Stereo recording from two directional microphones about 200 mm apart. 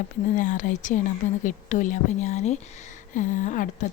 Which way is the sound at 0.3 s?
40° left (ahead or behind).